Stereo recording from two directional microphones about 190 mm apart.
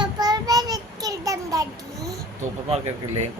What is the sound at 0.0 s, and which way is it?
Child singing, 20° right (ahead or behind).